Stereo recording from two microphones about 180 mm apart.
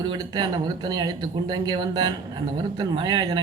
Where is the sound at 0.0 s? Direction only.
25° right (ahead or behind).